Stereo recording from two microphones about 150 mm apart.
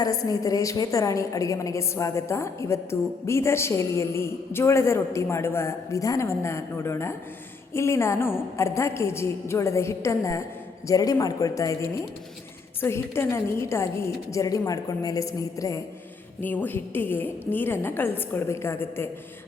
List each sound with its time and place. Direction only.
0.0 s a woman's voice: 25° left (ahead or behind)